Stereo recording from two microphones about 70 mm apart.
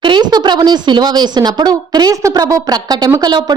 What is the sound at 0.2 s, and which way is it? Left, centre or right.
Speech, right.